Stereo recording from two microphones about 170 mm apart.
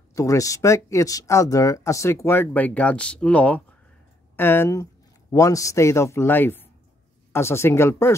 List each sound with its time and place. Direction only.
0.1 s speech: 20° left (ahead or behind)